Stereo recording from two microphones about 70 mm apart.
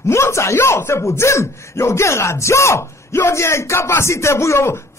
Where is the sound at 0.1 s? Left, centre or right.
Left.